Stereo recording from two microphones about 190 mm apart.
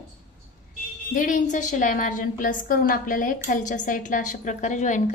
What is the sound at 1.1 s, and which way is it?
A woman's voice, 45° left (ahead or behind).